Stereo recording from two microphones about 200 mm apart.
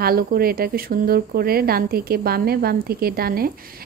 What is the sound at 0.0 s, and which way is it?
Speech, 50° right (ahead or behind).